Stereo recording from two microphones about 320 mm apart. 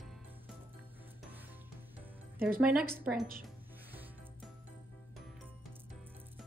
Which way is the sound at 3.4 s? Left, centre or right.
Centre.